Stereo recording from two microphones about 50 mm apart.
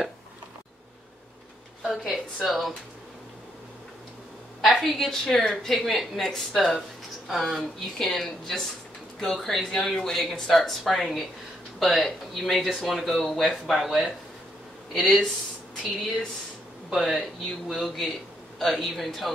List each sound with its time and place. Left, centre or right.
1.8 s a woman's voice: centre
4.6 s speech: centre
15.0 s speech: centre
17.0 s speech: centre